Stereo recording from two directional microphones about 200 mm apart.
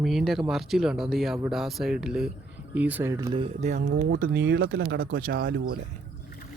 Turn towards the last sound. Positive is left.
turn(degrees=-50)  # may be behind; listen again after turning